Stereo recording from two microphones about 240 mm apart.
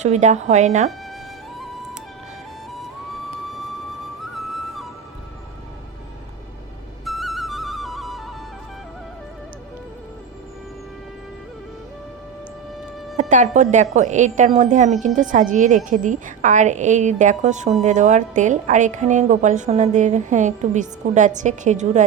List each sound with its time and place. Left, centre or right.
0.0 s speech: right
4.4 s music: centre
7.0 s flute: centre
13.1 s a woman's voice: right